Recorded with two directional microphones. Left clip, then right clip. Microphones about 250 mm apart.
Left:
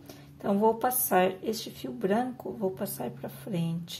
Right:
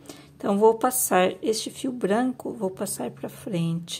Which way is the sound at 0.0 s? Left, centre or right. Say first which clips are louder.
Right 5 dB; right.